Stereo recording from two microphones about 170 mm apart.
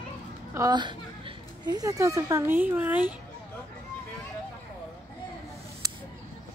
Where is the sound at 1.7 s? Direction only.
20° right (ahead or behind).